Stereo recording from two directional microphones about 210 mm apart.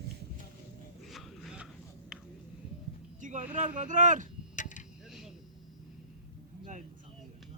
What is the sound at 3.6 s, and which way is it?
Speech, 35° right (ahead or behind).